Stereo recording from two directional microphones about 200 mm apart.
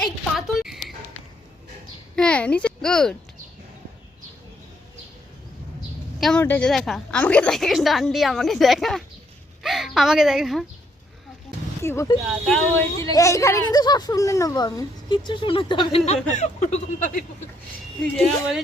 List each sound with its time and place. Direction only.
0.0 s a sound: centre (ahead or behind)
2.1 s a child's voice: 5° left (ahead or behind)
6.1 s a woman's voice: 5° left (ahead or behind)
11.8 s speech: 15° left (ahead or behind); by 17.2 s 40° left (ahead or behind)
18.0 s a woman's voice: centre (ahead or behind)